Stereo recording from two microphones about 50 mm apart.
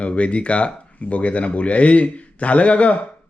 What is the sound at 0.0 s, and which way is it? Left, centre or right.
Speech, left.